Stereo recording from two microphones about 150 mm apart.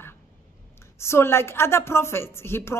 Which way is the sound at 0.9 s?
15° left (ahead or behind).